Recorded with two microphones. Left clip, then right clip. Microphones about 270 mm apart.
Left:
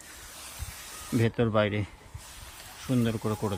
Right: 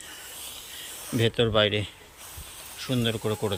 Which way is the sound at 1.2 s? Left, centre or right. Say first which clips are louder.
Right 4 dB; centre.